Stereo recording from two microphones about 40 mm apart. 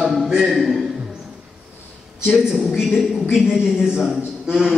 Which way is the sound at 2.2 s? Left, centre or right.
Centre.